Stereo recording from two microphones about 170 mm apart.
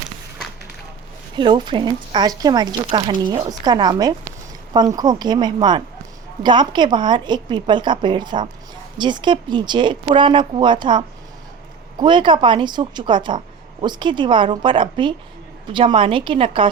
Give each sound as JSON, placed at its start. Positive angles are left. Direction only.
{"t": 1.4, "sound": "a woman's voice", "side_deg": -25}